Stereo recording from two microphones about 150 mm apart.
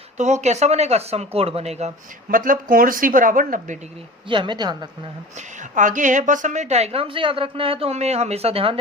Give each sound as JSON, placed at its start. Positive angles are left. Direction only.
{"t": 0.2, "sound": "a woman's voice", "side_deg": -50}
{"t": 2.3, "sound": "speech", "side_deg": -70}
{"t": 4.3, "sound": "a woman's voice", "side_deg": -35}
{"t": 5.7, "sound": "a woman's voice", "side_deg": -60}